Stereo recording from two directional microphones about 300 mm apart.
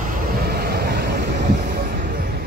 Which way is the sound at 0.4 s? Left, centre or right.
Right.